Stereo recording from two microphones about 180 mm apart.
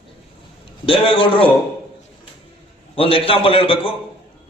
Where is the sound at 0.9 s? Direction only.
30° left (ahead or behind).